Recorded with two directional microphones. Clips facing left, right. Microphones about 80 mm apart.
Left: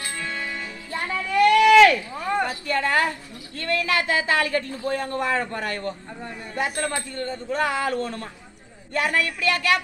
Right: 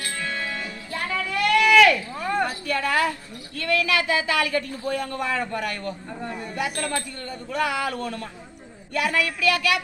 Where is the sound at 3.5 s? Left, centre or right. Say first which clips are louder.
Right 1 dB; left.